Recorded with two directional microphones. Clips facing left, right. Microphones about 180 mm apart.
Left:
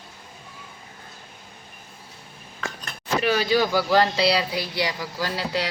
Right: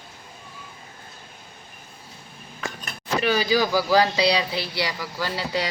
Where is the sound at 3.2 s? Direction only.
Centre (ahead or behind).